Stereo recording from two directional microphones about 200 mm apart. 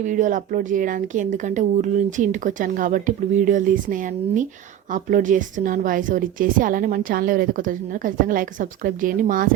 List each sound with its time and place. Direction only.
0.0 s a woman's voice: 40° right (ahead or behind)